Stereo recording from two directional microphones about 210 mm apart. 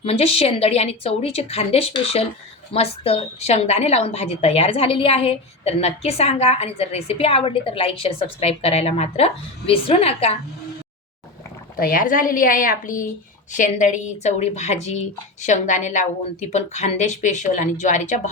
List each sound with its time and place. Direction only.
0.0 s a woman's voice: 30° left (ahead or behind)
11.8 s a woman's voice: 40° left (ahead or behind)